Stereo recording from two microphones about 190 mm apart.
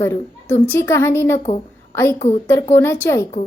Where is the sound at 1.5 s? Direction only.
30° left (ahead or behind).